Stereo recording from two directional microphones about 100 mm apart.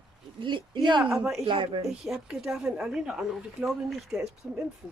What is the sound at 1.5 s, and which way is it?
Speech, 55° right (ahead or behind).